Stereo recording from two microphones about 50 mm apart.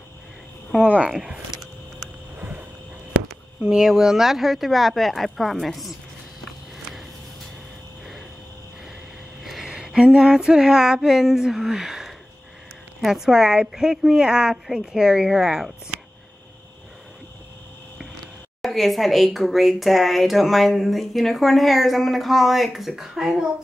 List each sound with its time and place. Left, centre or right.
0.8 s speech: right
3.7 s speech: centre
9.4 s a sound: centre
9.9 s a woman's voice: centre
18.6 s speech: centre